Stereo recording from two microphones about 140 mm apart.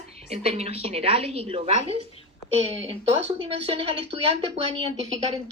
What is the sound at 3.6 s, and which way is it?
Speech, 40° right (ahead or behind).